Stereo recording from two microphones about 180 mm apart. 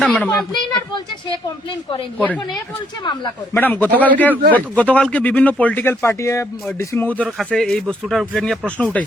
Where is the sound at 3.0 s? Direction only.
25° left (ahead or behind).